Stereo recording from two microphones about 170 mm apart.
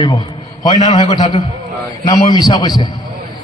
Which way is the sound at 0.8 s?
45° left (ahead or behind).